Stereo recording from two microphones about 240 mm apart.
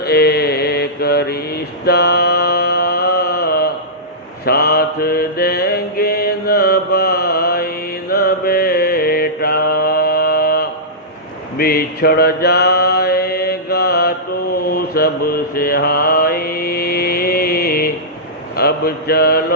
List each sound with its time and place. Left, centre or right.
0.0 s mantra: left